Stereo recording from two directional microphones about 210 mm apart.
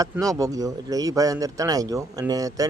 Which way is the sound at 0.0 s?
15° right (ahead or behind).